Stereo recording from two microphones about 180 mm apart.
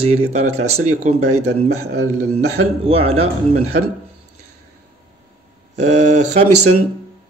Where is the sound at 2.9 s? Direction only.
35° right (ahead or behind).